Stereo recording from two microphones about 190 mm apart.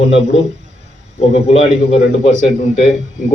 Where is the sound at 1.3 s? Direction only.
35° left (ahead or behind).